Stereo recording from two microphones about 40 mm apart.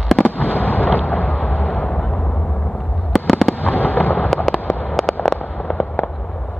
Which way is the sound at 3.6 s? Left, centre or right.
Left.